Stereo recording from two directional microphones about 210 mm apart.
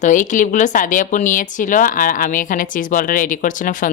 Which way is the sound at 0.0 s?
35° left (ahead or behind).